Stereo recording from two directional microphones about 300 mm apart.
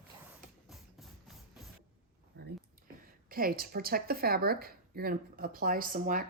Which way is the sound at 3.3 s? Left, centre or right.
Right.